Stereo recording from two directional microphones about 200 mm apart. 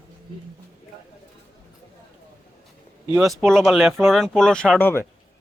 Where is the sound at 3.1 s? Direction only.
Centre (ahead or behind).